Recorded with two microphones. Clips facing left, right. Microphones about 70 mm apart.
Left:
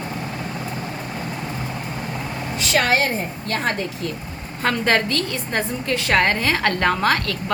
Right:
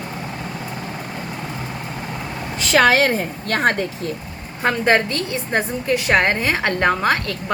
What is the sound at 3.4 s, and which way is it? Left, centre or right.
Speech, right.